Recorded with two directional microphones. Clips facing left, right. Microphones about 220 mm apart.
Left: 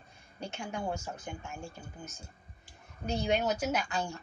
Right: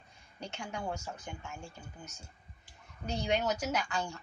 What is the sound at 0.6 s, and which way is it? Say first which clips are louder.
Speech: left 3 dB; 25° left (ahead or behind).